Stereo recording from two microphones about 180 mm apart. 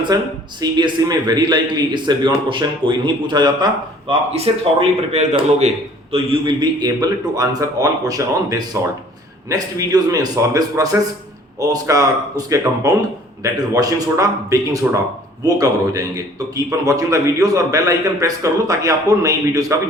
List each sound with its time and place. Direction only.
0.1 s a man's voice: 20° right (ahead or behind)
4.4 s a man's voice: 35° right (ahead or behind); by 19.8 s 20° right (ahead or behind)